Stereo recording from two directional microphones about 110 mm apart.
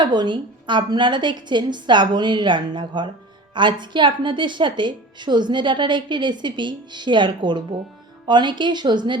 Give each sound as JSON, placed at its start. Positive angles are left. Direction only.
{"t": 0.0, "sound": "a woman's voice", "side_deg": -45}